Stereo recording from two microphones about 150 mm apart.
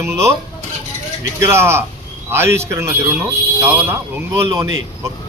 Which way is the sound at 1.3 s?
15° right (ahead or behind).